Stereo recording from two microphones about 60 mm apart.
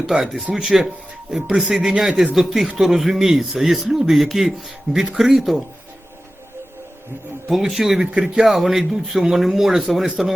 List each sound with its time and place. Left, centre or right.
0.1 s speech: centre
1.5 s speech: centre
7.4 s speech: centre